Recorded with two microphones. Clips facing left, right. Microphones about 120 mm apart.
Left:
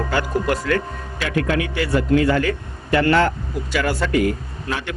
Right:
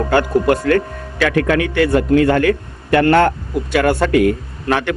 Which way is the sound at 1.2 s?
65° right (ahead or behind).